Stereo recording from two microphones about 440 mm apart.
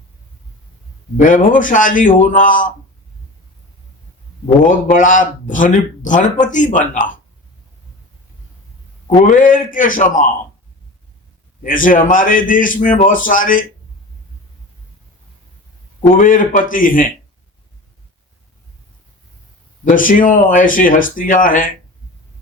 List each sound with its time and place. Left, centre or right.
1.1 s speech: centre
4.6 s speech: centre
9.0 s speech: centre
11.6 s speech: centre
16.1 s speech: centre
19.8 s speech: centre